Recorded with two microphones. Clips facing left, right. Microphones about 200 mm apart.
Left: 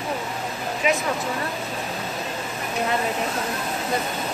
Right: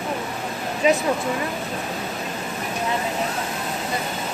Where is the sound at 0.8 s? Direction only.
35° right (ahead or behind).